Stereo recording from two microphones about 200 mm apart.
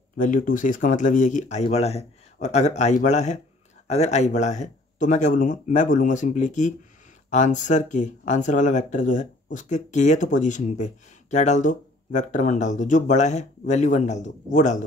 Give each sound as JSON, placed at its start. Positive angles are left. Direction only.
{"t": 0.2, "sound": "speech", "side_deg": 40}